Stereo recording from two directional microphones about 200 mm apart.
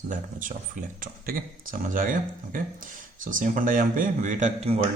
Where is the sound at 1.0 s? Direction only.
45° right (ahead or behind).